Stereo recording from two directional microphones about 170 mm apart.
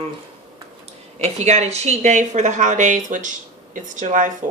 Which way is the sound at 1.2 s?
40° right (ahead or behind).